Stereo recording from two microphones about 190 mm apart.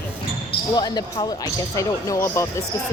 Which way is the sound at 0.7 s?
20° left (ahead or behind).